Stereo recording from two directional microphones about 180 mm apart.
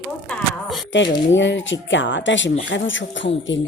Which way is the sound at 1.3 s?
90° left.